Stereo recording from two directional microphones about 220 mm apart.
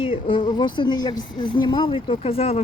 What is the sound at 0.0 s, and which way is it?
Speech, 25° left (ahead or behind).